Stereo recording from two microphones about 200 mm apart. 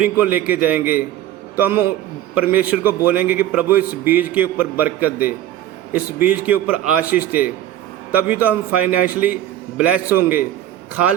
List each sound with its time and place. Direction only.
0.0 s a man's voice: 10° right (ahead or behind)